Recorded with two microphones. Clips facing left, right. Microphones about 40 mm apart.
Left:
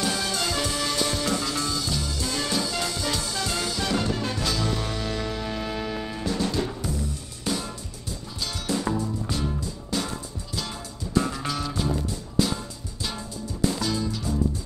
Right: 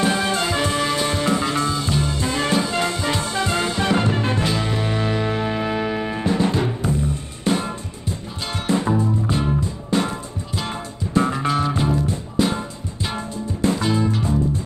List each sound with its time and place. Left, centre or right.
0.0 s music: right